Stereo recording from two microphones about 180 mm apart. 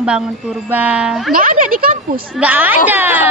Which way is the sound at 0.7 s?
10° right (ahead or behind).